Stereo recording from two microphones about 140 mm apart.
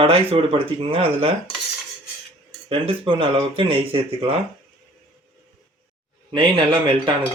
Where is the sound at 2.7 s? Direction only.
40° right (ahead or behind).